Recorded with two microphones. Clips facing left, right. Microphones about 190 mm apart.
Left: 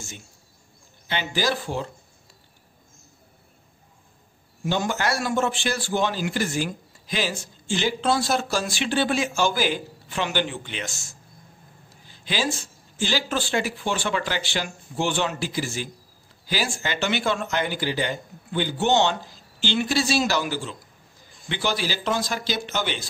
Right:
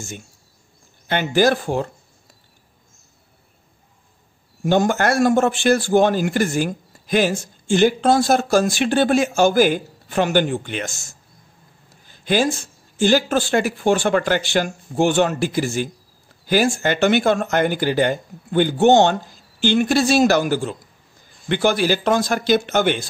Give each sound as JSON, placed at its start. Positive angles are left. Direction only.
{"t": 1.0, "sound": "a man's voice", "side_deg": -50}
{"t": 4.6, "sound": "a man's voice", "side_deg": -50}
{"t": 12.1, "sound": "a sound", "side_deg": -50}
{"t": 13.0, "sound": "a man's voice", "side_deg": -50}